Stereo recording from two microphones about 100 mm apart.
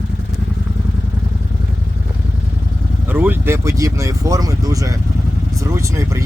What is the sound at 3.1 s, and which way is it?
Speech, 20° right (ahead or behind).